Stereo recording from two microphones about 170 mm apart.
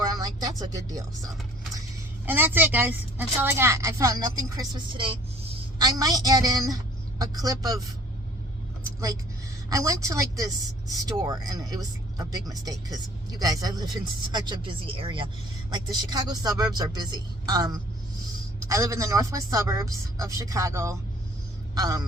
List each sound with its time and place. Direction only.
0.0 s a woman's voice: 20° right (ahead or behind)
8.8 s vehicle: 20° right (ahead or behind)
9.6 s a woman's voice: 20° right (ahead or behind)